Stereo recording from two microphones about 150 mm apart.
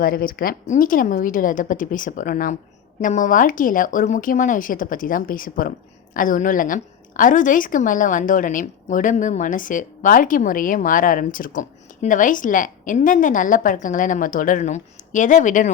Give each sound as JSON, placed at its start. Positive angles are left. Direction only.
{"t": 0.0, "sound": "a woman's voice", "side_deg": 75}